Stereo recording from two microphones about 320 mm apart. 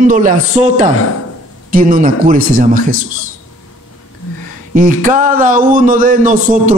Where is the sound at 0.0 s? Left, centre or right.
Right.